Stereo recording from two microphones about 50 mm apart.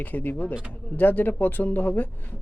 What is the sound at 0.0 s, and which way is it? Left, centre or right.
Speech, left.